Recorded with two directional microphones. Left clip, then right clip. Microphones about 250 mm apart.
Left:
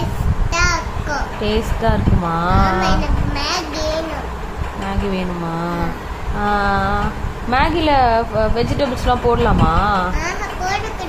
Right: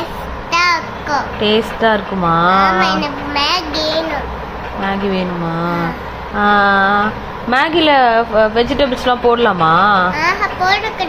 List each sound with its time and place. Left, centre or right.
0.5 s child singing: centre
1.4 s speech: centre
2.8 s a child's voice: centre
6.4 s speech: centre
10.2 s a child's voice: centre